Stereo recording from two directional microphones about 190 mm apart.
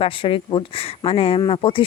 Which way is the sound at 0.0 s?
30° left (ahead or behind).